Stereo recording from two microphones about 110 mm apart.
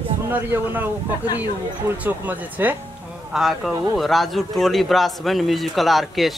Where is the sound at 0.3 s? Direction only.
15° right (ahead or behind).